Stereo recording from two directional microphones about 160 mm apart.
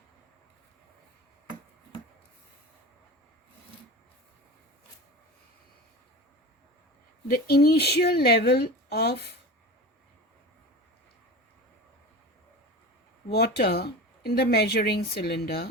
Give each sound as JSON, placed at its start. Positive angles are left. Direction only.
{"t": 7.3, "sound": "speech", "side_deg": 75}
{"t": 13.3, "sound": "speech", "side_deg": 80}